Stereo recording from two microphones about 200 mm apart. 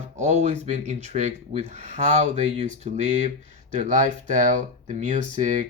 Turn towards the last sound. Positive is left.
turn(degrees=-40)  # may be behind; listen again after turning